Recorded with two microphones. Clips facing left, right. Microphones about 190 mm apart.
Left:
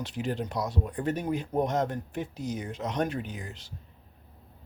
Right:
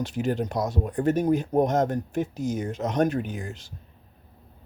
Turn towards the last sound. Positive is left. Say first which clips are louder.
# right 6 dB
turn(degrees=-45)  # may be behind; listen again after turning